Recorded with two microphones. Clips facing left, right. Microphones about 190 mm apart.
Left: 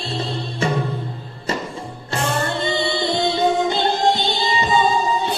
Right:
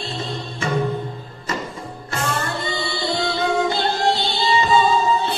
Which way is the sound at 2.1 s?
25° left (ahead or behind).